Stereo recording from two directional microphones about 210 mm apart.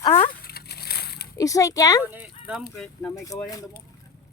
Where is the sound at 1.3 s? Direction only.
15° left (ahead or behind).